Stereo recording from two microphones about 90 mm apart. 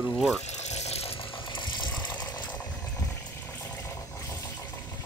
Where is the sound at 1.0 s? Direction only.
65° left (ahead or behind).